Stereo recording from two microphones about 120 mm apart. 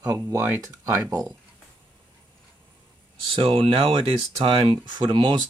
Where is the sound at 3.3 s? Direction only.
45° right (ahead or behind).